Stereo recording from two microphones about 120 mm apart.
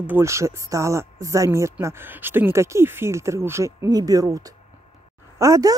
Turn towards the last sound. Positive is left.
turn(degrees=-25)  # may be behind; listen again after turning